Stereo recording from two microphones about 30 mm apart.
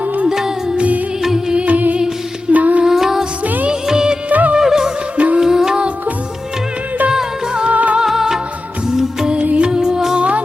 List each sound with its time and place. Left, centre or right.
0.3 s music: centre
1.6 s music: right
2.8 s music: centre
3.4 s music: right
3.8 s music of bollywood: right
4.3 s music: right
4.6 s music: centre
5.1 s music: right
5.4 s music: centre
7.1 s music: right
7.7 s music: right
8.0 s music: centre
9.6 s music: right
10.2 s music: right